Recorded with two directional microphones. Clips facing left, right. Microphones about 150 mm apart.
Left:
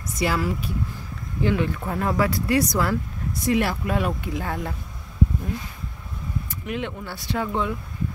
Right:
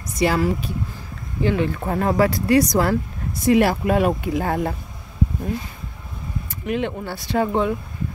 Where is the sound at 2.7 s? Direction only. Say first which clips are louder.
Right 4 dB; 45° right (ahead or behind).